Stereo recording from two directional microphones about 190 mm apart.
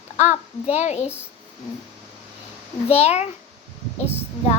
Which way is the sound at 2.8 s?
35° left (ahead or behind).